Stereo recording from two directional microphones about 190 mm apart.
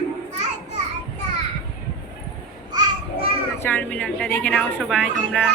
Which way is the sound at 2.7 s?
30° right (ahead or behind).